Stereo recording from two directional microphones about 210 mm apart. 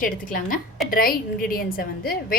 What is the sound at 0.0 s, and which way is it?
A woman's voice, 40° left (ahead or behind).